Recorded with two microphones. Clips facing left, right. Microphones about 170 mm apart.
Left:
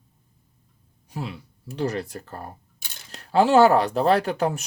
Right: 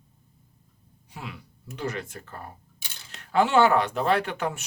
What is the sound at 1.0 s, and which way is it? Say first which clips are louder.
Speech: left 7 dB; 35° left (ahead or behind).